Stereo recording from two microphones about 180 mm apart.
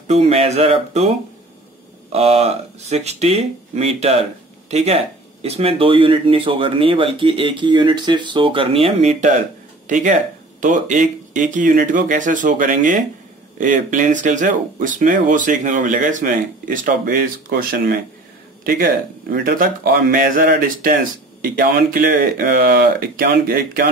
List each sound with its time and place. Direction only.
0.1 s speech: 35° right (ahead or behind)
2.1 s speech: 35° right (ahead or behind)
9.8 s speech: 45° right (ahead or behind)